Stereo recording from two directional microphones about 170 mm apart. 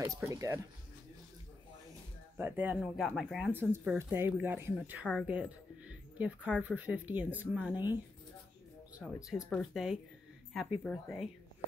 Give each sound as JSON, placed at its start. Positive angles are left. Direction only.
{"t": 0.0, "sound": "speech", "side_deg": -20}
{"t": 2.3, "sound": "speech", "side_deg": -10}
{"t": 3.5, "sound": "speech", "side_deg": -10}
{"t": 9.0, "sound": "speech", "side_deg": 0}